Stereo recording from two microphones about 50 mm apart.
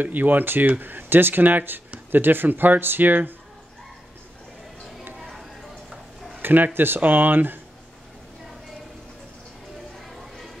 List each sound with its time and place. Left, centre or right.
0.0 s speech: right
5.3 s tick-tock: centre
6.4 s speech: right
9.9 s a sound: centre